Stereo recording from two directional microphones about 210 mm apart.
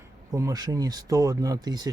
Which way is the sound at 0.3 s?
15° right (ahead or behind).